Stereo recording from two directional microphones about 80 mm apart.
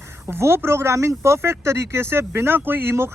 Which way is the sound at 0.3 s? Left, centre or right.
Right.